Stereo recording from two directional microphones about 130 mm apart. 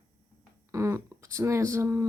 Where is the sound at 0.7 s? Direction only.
25° right (ahead or behind).